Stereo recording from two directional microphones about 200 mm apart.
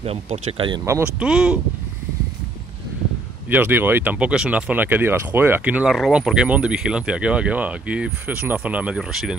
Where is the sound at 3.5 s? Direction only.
10° right (ahead or behind).